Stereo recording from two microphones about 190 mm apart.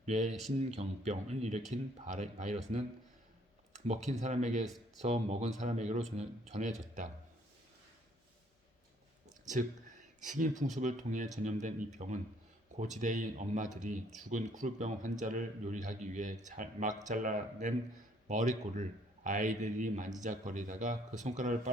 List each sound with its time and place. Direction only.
0.0 s speech: 35° right (ahead or behind)
0.3 s speech: centre (ahead or behind)
0.8 s speech: 35° right (ahead or behind)
10.2 s speech: 40° right (ahead or behind)